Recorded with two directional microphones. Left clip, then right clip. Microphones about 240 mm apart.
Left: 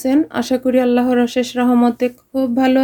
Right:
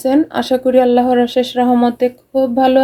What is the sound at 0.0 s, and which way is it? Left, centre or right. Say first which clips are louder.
Speech: right 3 dB; left.